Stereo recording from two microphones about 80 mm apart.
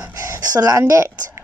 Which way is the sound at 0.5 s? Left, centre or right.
Right.